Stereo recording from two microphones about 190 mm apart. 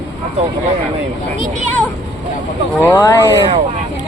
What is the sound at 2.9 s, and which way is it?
Speech, 15° left (ahead or behind).